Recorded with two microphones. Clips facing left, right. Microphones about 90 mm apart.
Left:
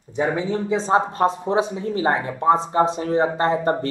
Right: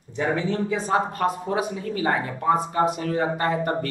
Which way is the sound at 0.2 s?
15° left (ahead or behind).